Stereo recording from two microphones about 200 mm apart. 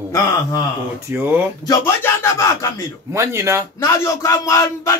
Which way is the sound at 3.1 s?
15° right (ahead or behind).